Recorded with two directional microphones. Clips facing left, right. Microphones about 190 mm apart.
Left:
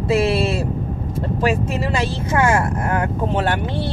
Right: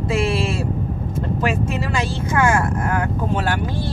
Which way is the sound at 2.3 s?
25° left (ahead or behind).